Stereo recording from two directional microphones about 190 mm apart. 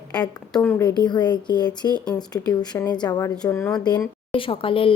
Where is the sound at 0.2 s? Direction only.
10° left (ahead or behind).